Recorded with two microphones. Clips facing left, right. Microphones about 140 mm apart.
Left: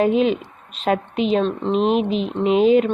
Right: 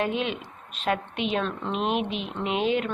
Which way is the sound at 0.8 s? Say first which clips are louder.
Left 7 dB; 35° left (ahead or behind).